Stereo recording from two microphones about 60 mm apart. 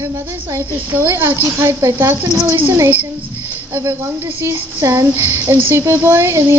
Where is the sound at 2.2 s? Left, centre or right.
Right.